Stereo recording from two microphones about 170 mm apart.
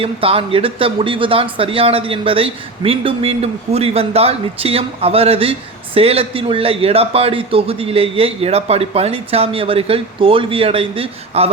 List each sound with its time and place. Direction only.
0.0 s speech: 35° right (ahead or behind)